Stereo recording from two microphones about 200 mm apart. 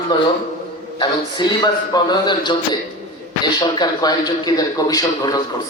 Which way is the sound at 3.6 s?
20° left (ahead or behind).